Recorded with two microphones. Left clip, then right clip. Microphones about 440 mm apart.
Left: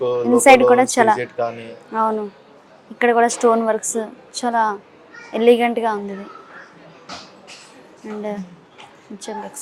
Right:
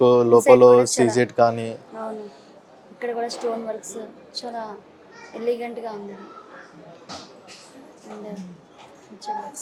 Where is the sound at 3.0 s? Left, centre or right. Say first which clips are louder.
Left 12 dB; left.